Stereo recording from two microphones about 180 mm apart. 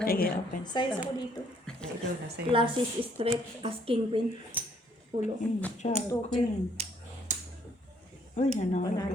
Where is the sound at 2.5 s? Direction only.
30° right (ahead or behind).